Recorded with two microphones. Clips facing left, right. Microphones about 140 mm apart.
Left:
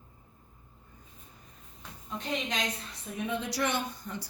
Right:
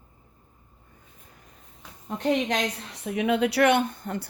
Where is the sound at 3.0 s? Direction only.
85° right; by 4.2 s 55° right (ahead or behind).